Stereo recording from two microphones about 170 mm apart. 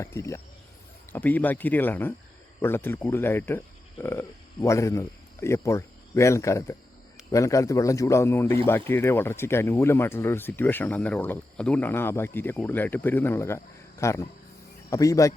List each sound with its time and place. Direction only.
0.0 s speech: 15° left (ahead or behind)